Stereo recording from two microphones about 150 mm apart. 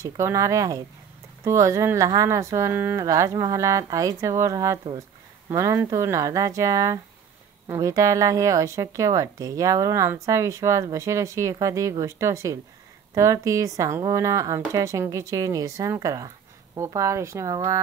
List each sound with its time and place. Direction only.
0.0 s speech: 20° right (ahead or behind)